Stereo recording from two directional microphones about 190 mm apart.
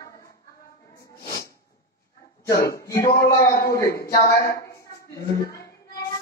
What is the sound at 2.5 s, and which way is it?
Speech, 50° left (ahead or behind).